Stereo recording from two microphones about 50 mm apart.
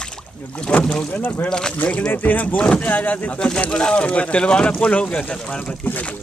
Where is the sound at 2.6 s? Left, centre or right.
Centre.